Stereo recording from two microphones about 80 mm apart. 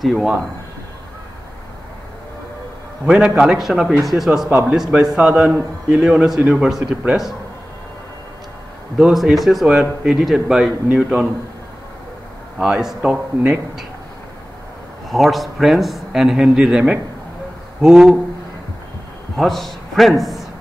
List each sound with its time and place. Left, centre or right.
0.0 s speech: centre
3.1 s a man's voice: centre
8.9 s speech: centre
10.9 s a man's voice: centre
12.5 s a man's voice: centre
15.0 s a man's voice: centre
19.3 s a man's voice: centre